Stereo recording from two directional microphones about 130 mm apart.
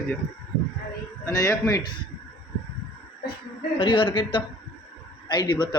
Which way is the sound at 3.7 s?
40° left (ahead or behind).